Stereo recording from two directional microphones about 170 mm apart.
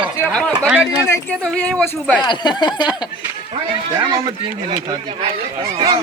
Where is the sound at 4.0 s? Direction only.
30° right (ahead or behind).